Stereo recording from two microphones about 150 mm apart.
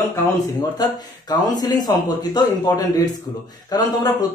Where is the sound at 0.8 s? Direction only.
25° left (ahead or behind).